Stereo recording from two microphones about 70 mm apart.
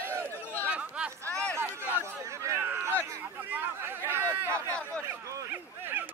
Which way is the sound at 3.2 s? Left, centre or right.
Right.